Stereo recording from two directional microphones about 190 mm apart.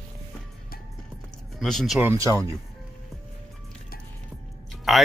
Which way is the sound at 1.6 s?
Centre (ahead or behind).